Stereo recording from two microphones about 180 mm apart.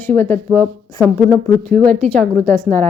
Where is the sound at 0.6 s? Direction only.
5° right (ahead or behind).